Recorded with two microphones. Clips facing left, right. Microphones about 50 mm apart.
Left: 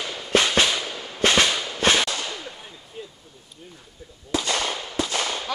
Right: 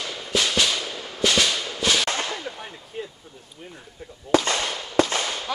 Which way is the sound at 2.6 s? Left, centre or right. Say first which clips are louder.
Right 5 dB; right.